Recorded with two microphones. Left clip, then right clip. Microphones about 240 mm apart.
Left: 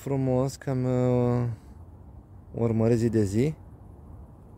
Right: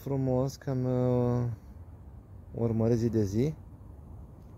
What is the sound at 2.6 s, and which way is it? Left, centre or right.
Speech, left.